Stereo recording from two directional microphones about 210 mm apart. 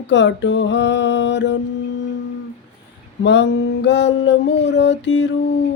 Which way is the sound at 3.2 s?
55° left (ahead or behind).